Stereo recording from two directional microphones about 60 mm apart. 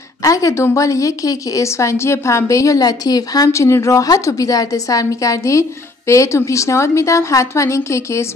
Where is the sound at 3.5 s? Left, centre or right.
Left.